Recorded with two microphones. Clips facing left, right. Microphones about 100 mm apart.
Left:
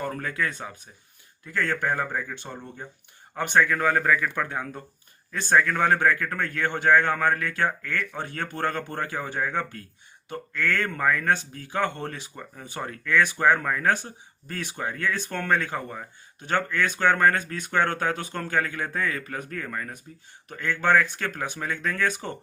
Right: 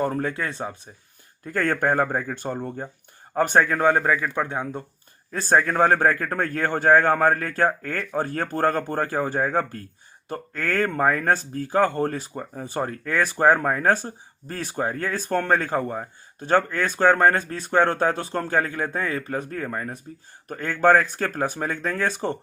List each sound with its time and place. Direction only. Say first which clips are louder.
0.0 s speech: right 4 dB; 30° right (ahead or behind)
1.5 s speech: right 4 dB; 50° right (ahead or behind); by 4.8 s 25° right (ahead or behind)
5.3 s speech: right 2 dB; 35° right (ahead or behind)